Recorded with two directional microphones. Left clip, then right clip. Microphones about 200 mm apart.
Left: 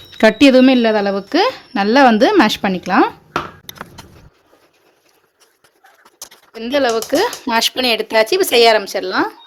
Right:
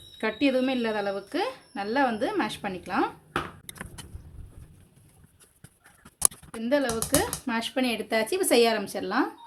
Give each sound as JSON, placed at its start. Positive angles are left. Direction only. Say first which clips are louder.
{"t": 0.2, "sound": "a woman's voice", "louder": "left 16 dB", "side_deg": 50}
{"t": 6.6, "sound": "speech", "louder": "left 10 dB", "side_deg": 45}